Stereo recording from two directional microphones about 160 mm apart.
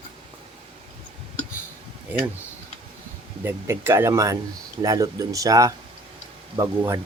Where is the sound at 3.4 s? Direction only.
15° right (ahead or behind).